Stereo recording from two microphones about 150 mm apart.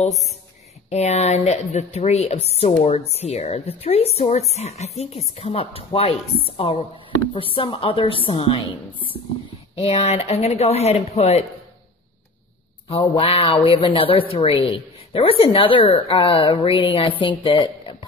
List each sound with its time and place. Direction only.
0.0 s a woman's voice: 50° left (ahead or behind); by 8.6 s 35° left (ahead or behind)
9.8 s speech: 45° left (ahead or behind)
12.8 s a woman's voice: 35° left (ahead or behind)